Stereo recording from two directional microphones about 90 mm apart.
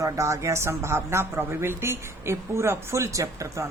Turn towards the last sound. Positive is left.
turn(degrees=-35)  # may be behind; listen again after turning